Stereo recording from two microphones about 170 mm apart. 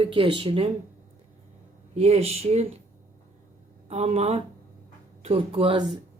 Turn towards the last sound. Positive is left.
turn(degrees=-30)  # may be behind; listen again after turning